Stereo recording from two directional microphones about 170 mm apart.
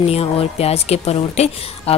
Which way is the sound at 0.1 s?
35° left (ahead or behind).